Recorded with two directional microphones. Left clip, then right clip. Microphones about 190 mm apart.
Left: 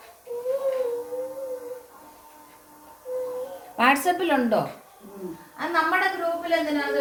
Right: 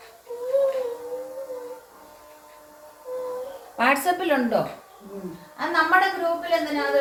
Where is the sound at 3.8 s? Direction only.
35° left (ahead or behind).